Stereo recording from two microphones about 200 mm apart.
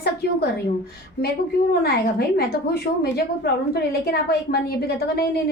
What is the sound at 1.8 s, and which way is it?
A woman's voice, 50° left (ahead or behind).